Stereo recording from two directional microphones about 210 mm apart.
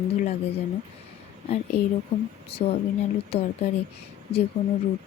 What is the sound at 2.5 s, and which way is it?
Speech, 30° left (ahead or behind).